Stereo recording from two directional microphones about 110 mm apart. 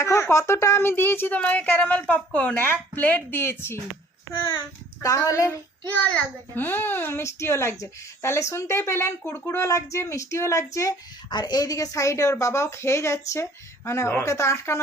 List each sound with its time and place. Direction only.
0.0 s a child's voice: 25° left (ahead or behind)
5.0 s a child's voice: 30° left (ahead or behind)
5.9 s a child's voice: 15° left (ahead or behind); by 10.9 s 30° left (ahead or behind)
11.3 s a child's voice: 40° left (ahead or behind)